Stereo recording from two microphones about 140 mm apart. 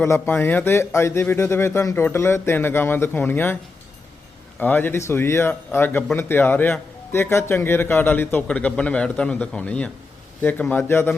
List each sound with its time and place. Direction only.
0.0 s speech: 15° left (ahead or behind)
4.6 s speech: 15° left (ahead or behind)